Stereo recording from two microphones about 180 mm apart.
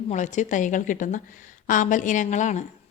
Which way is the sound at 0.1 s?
40° left (ahead or behind).